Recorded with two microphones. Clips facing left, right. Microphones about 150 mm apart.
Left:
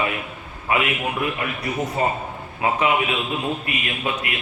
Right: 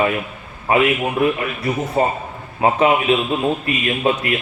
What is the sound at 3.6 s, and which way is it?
Speech, 40° right (ahead or behind).